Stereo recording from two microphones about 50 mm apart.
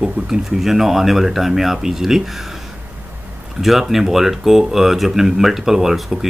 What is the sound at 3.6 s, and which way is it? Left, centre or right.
Speech, centre.